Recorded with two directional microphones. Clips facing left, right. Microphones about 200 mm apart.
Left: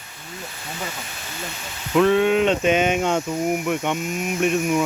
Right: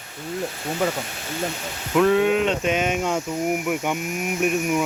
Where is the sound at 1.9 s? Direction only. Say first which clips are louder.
Left 1 dB; 5° right (ahead or behind).